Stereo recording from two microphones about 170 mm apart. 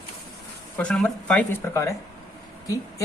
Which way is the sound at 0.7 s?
5° left (ahead or behind).